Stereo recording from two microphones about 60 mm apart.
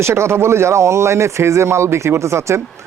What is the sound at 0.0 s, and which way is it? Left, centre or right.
A man's voice, right.